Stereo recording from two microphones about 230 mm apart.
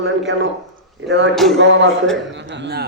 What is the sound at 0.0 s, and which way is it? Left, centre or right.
A man's voice, right.